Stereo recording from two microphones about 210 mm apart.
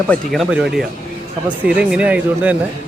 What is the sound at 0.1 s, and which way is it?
Speech, centre (ahead or behind).